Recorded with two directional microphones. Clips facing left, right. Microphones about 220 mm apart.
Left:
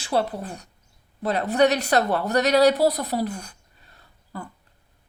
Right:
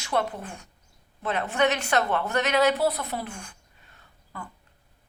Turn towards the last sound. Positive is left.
turn(degrees=35)  # may be behind; listen again after turning